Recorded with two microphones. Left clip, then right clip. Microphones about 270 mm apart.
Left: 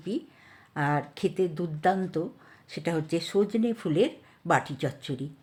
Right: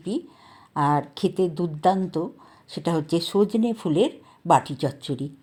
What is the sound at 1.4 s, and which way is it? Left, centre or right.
Speech, centre.